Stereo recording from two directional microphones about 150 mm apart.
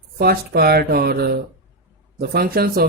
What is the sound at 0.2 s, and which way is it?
Speech, 90° right.